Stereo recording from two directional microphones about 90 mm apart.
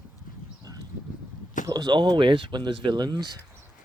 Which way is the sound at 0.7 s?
40° right (ahead or behind).